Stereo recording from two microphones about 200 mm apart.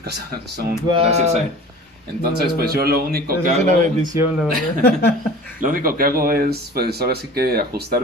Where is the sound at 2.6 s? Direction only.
50° right (ahead or behind).